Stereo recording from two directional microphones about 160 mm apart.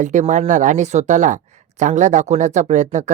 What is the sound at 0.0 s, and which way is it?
Speech, 50° right (ahead or behind).